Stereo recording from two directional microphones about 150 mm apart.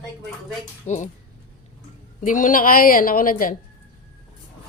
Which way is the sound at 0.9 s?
55° left (ahead or behind).